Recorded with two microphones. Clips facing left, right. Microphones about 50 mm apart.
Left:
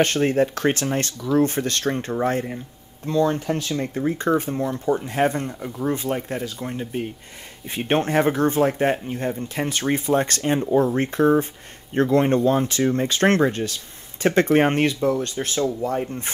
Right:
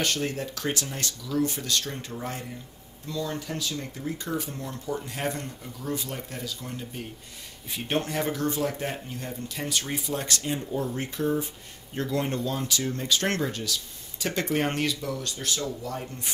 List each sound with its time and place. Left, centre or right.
0.0 s speech: left